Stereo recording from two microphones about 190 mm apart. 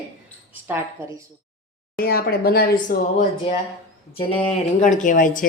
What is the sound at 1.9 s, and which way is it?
Speech, 55° left (ahead or behind).